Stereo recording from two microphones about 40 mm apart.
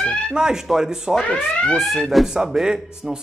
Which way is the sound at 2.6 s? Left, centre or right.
Centre.